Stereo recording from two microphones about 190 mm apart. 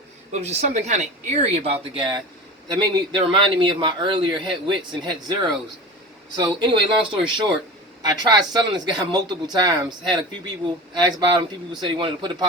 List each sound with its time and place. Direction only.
0.3 s a man's voice: 35° right (ahead or behind)